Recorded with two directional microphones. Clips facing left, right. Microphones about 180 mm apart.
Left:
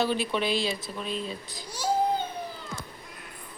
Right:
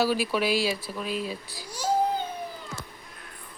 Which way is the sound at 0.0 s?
5° right (ahead or behind).